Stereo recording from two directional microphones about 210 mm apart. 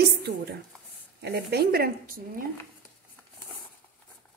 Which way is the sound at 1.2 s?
50° right (ahead or behind).